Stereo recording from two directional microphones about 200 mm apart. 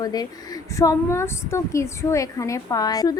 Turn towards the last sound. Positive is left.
turn(degrees=20)  # may be behind; listen again after turning